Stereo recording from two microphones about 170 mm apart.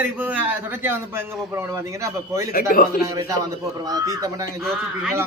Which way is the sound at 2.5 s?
55° left (ahead or behind).